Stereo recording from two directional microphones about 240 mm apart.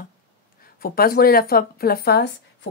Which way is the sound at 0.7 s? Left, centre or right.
Left.